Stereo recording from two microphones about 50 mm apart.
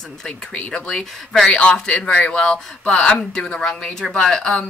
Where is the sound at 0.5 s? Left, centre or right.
Left.